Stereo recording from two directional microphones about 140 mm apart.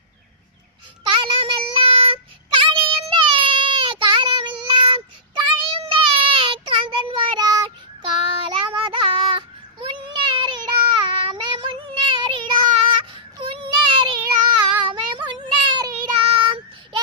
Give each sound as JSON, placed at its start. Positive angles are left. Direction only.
{"t": 1.1, "sound": "child singing", "side_deg": -40}